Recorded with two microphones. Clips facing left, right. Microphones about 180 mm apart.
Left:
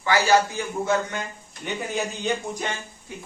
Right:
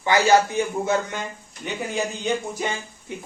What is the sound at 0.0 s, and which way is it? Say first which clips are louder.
Speech: right 2 dB; 20° right (ahead or behind).